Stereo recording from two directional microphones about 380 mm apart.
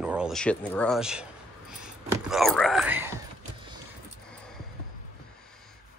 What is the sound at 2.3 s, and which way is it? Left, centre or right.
Speech, centre.